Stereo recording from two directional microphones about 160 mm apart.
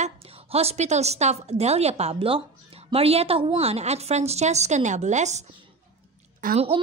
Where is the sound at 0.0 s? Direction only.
40° right (ahead or behind).